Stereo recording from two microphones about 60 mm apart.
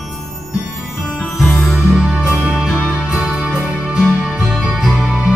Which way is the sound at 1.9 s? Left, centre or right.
Centre.